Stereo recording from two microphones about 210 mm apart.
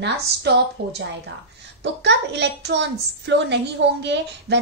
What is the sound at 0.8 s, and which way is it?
A woman's voice, 50° right (ahead or behind).